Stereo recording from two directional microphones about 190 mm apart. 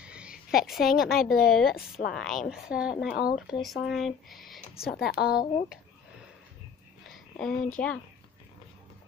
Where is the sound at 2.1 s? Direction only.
Centre (ahead or behind).